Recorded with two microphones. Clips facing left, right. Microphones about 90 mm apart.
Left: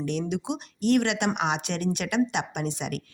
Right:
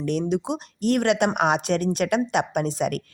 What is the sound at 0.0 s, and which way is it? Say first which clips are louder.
Speech: right 5 dB; 40° right (ahead or behind).